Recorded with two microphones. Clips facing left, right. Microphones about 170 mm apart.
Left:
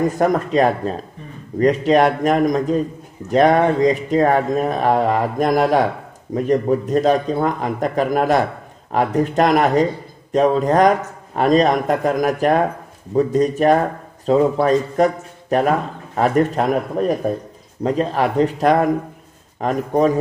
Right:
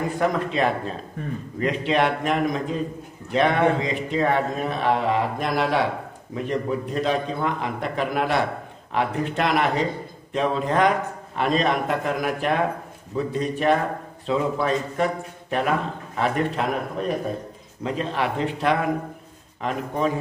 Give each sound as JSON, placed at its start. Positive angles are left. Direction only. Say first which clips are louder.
{"t": 0.0, "sound": "a man's voice", "louder": "left 6 dB", "side_deg": 40}